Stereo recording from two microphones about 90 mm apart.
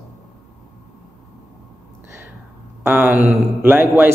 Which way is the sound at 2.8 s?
20° right (ahead or behind).